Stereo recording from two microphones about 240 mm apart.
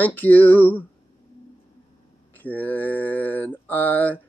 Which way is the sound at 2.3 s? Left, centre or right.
Centre.